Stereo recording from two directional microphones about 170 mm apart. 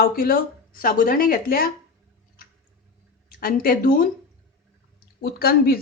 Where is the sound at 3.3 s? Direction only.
55° left (ahead or behind).